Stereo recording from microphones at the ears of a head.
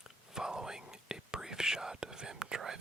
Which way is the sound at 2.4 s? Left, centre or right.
Right.